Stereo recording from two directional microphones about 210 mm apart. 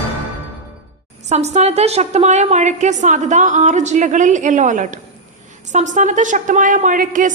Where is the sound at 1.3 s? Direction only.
30° right (ahead or behind).